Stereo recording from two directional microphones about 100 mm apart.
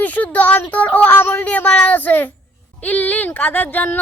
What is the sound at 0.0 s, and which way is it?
A woman's voice, 15° left (ahead or behind).